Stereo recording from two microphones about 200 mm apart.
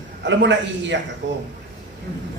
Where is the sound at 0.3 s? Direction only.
65° right (ahead or behind).